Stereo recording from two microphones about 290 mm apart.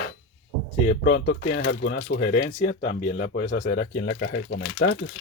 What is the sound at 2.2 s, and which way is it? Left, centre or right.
Speech, left.